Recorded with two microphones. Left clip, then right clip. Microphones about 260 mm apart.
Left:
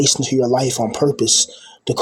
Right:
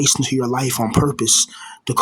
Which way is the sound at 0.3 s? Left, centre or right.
Right.